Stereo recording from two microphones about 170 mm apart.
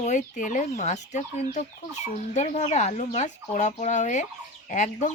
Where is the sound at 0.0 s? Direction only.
45° left (ahead or behind).